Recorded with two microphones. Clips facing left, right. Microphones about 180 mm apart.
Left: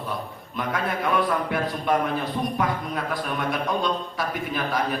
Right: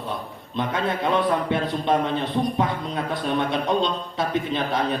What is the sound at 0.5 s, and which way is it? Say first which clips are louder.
A man's voice: right 2 dB; 25° right (ahead or behind).